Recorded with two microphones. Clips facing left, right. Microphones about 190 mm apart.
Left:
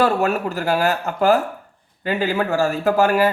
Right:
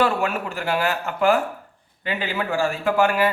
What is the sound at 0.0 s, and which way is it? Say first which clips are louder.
Speech: left 3 dB; 40° left (ahead or behind).